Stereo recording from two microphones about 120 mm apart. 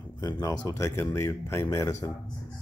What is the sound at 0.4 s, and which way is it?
Speech, 25° left (ahead or behind).